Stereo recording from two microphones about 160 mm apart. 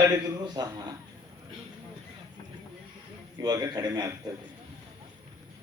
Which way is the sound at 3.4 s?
25° right (ahead or behind).